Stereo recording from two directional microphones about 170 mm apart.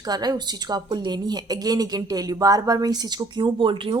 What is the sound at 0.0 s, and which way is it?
A woman's voice, 25° right (ahead or behind).